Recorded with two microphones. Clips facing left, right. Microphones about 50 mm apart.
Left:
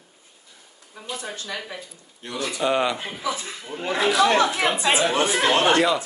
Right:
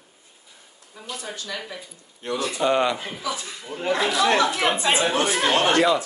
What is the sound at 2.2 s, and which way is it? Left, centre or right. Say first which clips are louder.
Speech: right 3 dB; right.